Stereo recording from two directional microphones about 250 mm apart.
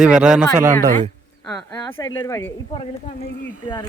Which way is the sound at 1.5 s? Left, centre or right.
Centre.